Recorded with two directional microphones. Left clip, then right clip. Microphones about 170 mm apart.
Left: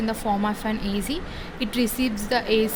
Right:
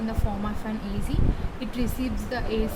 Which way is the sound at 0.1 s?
55° left (ahead or behind).